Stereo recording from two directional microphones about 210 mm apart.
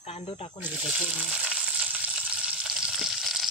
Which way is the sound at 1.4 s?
5° right (ahead or behind).